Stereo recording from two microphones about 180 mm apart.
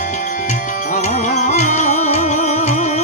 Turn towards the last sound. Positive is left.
turn(degrees=40)  # may be behind; listen again after turning